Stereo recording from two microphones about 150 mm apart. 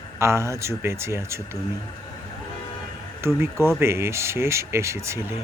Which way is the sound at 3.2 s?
15° right (ahead or behind).